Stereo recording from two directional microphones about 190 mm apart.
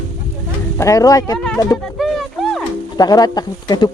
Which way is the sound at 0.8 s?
15° left (ahead or behind).